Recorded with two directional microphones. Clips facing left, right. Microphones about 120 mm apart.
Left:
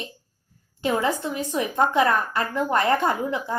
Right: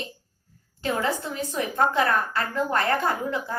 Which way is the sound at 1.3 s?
20° left (ahead or behind).